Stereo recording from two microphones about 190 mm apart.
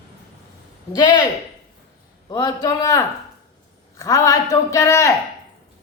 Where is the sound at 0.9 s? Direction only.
20° left (ahead or behind).